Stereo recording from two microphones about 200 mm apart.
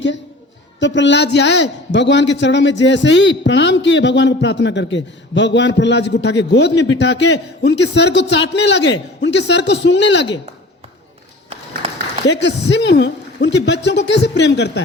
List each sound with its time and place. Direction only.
0.8 s a man's voice: 65° left (ahead or behind)
12.2 s a man's voice: 60° left (ahead or behind)